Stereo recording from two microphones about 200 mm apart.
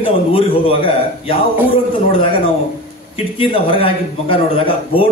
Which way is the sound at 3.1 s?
25° left (ahead or behind).